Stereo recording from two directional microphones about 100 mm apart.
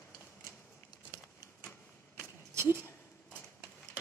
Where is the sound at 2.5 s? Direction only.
20° right (ahead or behind).